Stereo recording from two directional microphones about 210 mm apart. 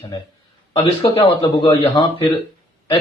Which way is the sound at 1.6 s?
20° left (ahead or behind).